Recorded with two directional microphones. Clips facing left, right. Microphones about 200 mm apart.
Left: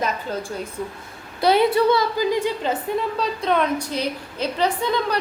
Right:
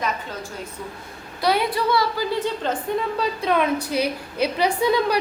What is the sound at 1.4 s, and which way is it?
A woman's voice, 25° left (ahead or behind).